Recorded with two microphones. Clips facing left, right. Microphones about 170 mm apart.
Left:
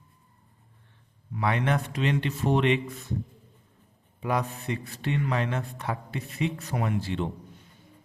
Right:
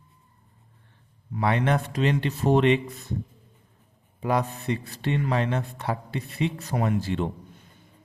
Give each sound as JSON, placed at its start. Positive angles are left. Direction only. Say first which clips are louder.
{"t": 1.3, "sound": "speech", "louder": "right 3 dB", "side_deg": -35}
{"t": 4.2, "sound": "speech", "louder": "right 3 dB", "side_deg": -35}